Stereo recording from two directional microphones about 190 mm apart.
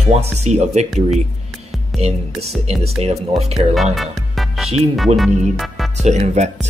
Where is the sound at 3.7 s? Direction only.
Centre (ahead or behind).